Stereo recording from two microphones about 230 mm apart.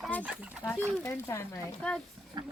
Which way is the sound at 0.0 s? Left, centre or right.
Centre.